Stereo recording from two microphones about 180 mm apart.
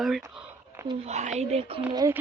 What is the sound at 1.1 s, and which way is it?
Speech, 40° right (ahead or behind).